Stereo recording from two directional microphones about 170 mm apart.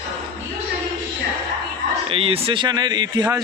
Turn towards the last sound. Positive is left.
turn(degrees=-25)  # may be behind; listen again after turning